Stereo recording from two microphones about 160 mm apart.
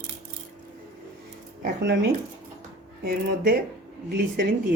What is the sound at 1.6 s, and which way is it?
Speech, 85° right.